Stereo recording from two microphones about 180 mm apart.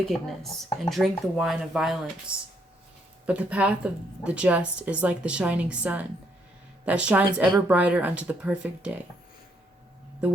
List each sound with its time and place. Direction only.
0.1 s speech: centre (ahead or behind)